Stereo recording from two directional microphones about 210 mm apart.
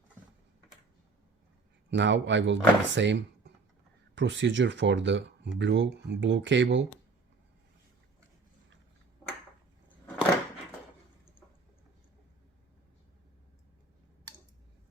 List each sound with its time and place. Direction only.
1.9 s speech: 60° right (ahead or behind)